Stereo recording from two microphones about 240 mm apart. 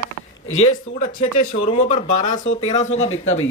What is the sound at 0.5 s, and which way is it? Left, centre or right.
Speech, left.